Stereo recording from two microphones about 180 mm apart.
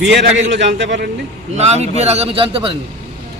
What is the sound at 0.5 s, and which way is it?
Speech, 80° right.